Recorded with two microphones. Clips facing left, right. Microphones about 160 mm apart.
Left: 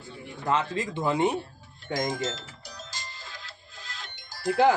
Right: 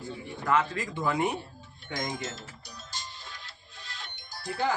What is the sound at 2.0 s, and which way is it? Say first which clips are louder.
Music: left 5 dB; 90° left.